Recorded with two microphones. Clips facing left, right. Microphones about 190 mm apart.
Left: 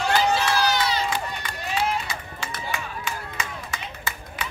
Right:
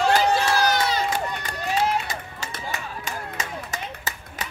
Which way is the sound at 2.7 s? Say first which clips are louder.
Left 1 dB; 40° right (ahead or behind).